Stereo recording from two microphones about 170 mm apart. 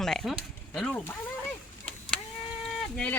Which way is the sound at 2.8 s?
5° left (ahead or behind).